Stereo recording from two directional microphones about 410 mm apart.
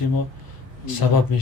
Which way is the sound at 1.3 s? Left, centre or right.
Left.